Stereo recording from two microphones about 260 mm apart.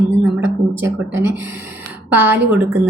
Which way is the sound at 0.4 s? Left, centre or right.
Right.